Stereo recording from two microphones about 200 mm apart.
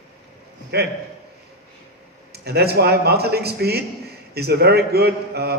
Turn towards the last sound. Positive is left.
turn(degrees=-50)  # may be behind; listen again after turning